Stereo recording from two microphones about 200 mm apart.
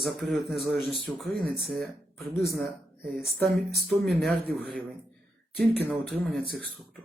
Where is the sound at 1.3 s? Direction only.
45° right (ahead or behind).